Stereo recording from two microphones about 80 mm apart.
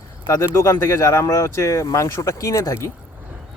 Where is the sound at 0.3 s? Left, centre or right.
Left.